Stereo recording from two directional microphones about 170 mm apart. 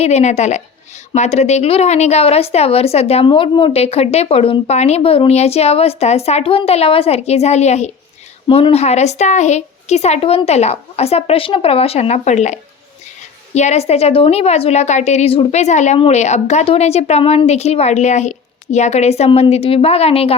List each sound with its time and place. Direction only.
0.0 s a woman's voice: 40° left (ahead or behind)